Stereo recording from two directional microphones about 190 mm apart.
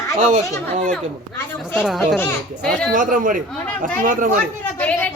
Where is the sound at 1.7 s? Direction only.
Centre (ahead or behind).